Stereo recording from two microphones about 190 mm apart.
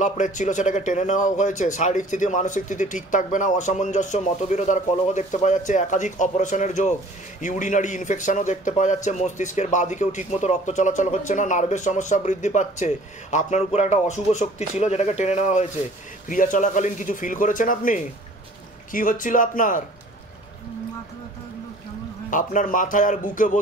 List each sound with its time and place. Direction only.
0.0 s a man's voice: 40° left (ahead or behind)
22.3 s a man's voice: 45° left (ahead or behind)